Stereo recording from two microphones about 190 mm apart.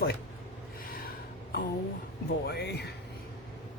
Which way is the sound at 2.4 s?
60° left (ahead or behind).